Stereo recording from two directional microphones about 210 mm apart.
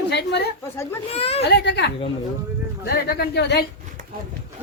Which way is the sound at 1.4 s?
55° left (ahead or behind).